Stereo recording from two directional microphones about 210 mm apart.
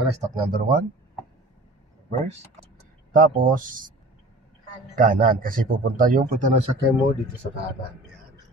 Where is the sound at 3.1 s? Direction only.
40° right (ahead or behind).